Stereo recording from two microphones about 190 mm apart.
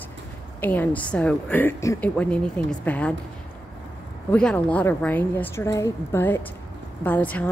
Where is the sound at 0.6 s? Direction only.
10° left (ahead or behind).